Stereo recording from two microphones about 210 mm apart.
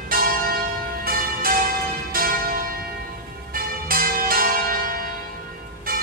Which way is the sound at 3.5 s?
45° right (ahead or behind).